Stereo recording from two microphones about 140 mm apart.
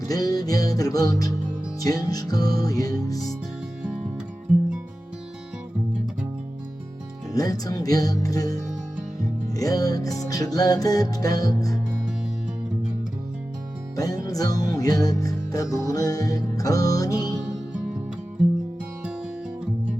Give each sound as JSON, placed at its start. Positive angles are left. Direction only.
{"t": 0.1, "sound": "music", "side_deg": 25}
{"t": 7.3, "sound": "music", "side_deg": 25}
{"t": 13.9, "sound": "music", "side_deg": 25}